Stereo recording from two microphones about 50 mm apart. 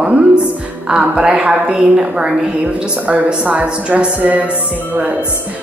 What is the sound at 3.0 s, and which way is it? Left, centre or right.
Speech, right.